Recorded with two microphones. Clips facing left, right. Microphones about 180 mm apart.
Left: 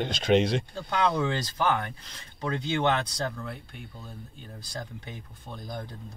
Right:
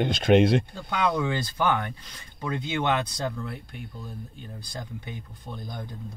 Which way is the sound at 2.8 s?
15° right (ahead or behind).